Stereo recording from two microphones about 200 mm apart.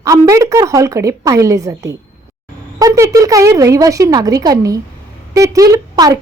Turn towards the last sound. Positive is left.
turn(degrees=-20)  # may be behind; listen again after turning